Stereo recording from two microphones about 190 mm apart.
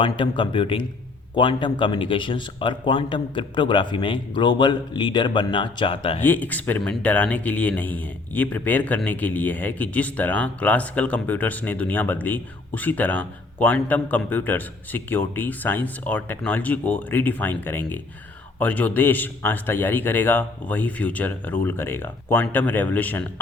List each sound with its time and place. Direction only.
0.0 s speech: 25° left (ahead or behind)
6.2 s speech: 10° left (ahead or behind)